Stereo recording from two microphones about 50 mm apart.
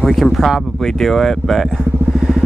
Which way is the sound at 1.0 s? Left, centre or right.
Centre.